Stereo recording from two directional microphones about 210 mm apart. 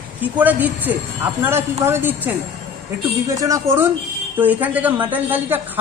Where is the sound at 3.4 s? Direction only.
15° right (ahead or behind).